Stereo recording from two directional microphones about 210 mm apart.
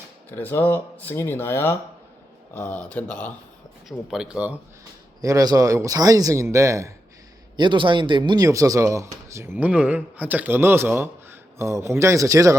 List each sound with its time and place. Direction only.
0.3 s speech: 10° left (ahead or behind); by 4.5 s 5° right (ahead or behind)
5.2 s speech: 15° right (ahead or behind)